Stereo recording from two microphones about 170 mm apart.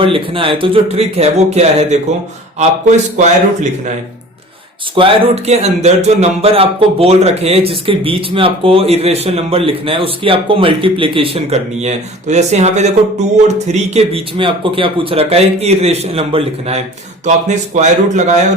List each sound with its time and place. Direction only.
0.0 s a man's voice: 30° right (ahead or behind)
4.9 s a man's voice: 30° right (ahead or behind)